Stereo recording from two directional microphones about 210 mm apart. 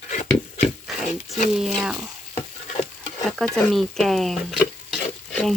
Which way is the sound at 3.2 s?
Centre (ahead or behind).